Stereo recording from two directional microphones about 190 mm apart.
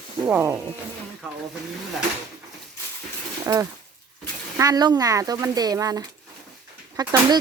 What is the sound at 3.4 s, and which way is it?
Speech, 20° right (ahead or behind).